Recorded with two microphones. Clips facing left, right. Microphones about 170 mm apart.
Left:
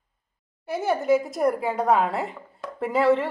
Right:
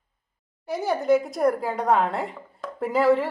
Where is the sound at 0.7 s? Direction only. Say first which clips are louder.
Even; 5° left (ahead or behind).